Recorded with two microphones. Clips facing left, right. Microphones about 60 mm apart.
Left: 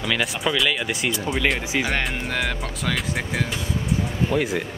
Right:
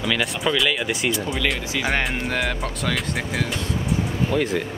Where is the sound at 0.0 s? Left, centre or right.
Centre.